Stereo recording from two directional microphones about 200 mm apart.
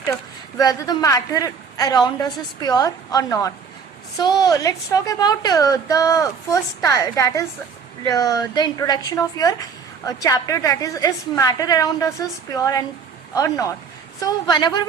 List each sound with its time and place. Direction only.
0.5 s a woman's voice: 20° left (ahead or behind)